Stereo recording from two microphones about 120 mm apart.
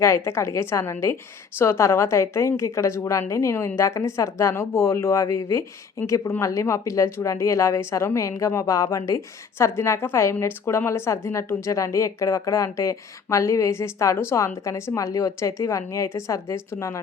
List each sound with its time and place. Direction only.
0.0 s speech: 20° left (ahead or behind)